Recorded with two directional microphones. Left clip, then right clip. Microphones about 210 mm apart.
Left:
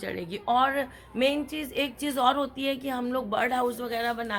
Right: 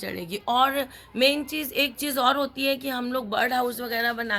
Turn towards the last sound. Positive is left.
turn(degrees=-40)  # may be behind; listen again after turning